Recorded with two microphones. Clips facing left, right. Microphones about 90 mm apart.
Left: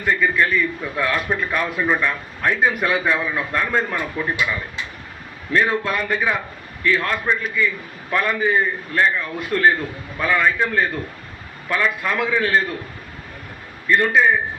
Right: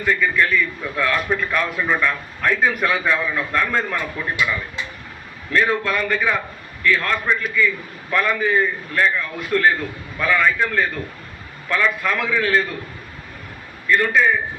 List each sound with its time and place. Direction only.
0.1 s a man's voice: 15° left (ahead or behind)
5.5 s a man's voice: 10° left (ahead or behind)
13.8 s a man's voice: 15° left (ahead or behind)